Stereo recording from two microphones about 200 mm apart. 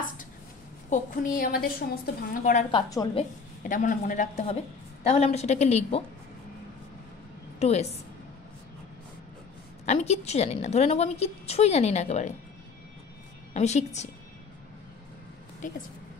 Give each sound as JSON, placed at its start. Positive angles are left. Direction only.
{"t": 0.8, "sound": "a woman's voice", "side_deg": 45}
{"t": 2.7, "sound": "a woman's voice", "side_deg": 20}
{"t": 3.6, "sound": "a woman's voice", "side_deg": 40}
{"t": 7.5, "sound": "a woman's voice", "side_deg": 30}
{"t": 9.8, "sound": "a woman's voice", "side_deg": 35}
{"t": 13.5, "sound": "a woman's voice", "side_deg": 35}
{"t": 15.6, "sound": "a woman's voice", "side_deg": 40}